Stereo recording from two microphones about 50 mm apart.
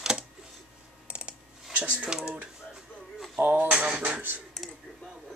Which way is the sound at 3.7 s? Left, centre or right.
Centre.